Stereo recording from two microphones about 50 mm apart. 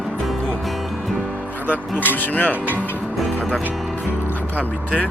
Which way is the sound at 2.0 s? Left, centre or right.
Left.